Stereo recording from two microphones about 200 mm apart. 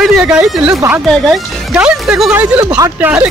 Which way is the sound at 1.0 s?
Centre (ahead or behind).